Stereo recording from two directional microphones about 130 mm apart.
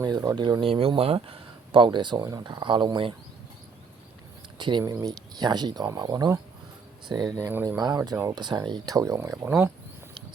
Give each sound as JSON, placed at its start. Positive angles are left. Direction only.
{"t": 0.0, "sound": "speech", "side_deg": -30}
{"t": 0.7, "sound": "speech", "side_deg": -45}
{"t": 4.5, "sound": "speech", "side_deg": -35}
{"t": 4.8, "sound": "speech", "side_deg": -25}
{"t": 7.4, "sound": "speech", "side_deg": -15}
{"t": 7.8, "sound": "speech", "side_deg": -30}
{"t": 8.4, "sound": "speech", "side_deg": -35}
{"t": 9.5, "sound": "speech", "side_deg": -10}